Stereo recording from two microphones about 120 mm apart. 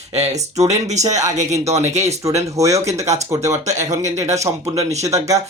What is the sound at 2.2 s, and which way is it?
Speech, 25° right (ahead or behind).